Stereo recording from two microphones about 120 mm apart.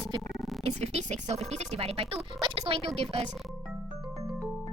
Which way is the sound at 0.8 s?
65° right (ahead or behind).